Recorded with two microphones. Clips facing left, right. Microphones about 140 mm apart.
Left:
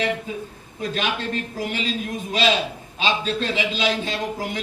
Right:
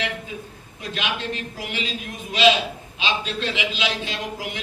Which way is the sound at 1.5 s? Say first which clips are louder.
Left 4 dB; 40° left (ahead or behind).